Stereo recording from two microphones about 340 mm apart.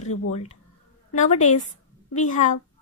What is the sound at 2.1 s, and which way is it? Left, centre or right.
Speech, left.